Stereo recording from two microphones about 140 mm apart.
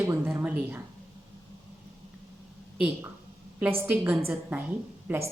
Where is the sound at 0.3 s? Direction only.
10° right (ahead or behind).